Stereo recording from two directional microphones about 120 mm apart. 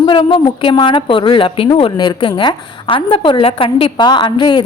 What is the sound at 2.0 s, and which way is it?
A woman's voice, 35° left (ahead or behind).